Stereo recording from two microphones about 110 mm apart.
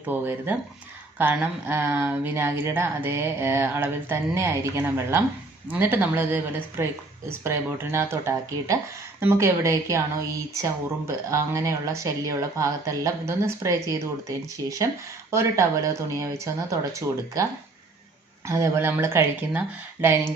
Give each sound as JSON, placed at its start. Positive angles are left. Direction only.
{"t": 0.0, "sound": "a woman's voice", "side_deg": -15}
{"t": 18.4, "sound": "a woman's voice", "side_deg": -25}